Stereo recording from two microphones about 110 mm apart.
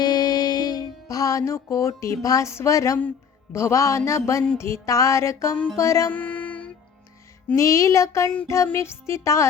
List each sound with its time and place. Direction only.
0.0 s music: 40° left (ahead or behind)
6.1 s music: 15° left (ahead or behind)
7.5 s music: 30° left (ahead or behind)